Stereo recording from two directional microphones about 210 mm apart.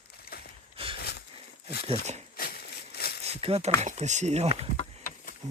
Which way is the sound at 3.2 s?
30° right (ahead or behind).